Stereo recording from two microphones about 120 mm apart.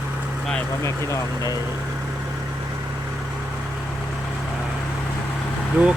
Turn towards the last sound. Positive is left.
turn(degrees=-10)  # may be behind; listen again after turning